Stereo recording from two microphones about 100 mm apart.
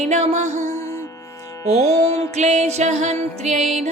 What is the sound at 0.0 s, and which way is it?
Music, 90° right.